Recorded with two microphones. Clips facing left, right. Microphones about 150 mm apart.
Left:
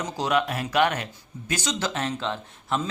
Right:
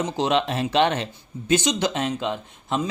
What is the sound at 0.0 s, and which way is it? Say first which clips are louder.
Speech: right 3 dB; 25° right (ahead or behind).